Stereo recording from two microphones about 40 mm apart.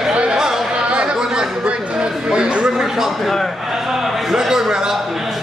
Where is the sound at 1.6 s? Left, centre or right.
Right.